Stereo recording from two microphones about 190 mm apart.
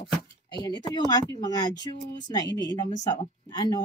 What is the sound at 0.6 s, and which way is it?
Speech, 20° left (ahead or behind).